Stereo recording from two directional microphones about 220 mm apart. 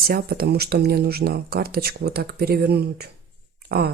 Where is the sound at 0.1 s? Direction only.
45° right (ahead or behind).